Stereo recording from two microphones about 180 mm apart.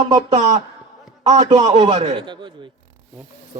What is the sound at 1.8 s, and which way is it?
Speech, 25° right (ahead or behind).